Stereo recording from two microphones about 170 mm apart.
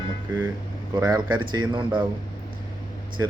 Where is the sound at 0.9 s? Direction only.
20° right (ahead or behind).